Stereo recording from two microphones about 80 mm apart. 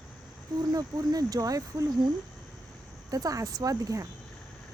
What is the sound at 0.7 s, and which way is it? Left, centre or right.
Speech, right.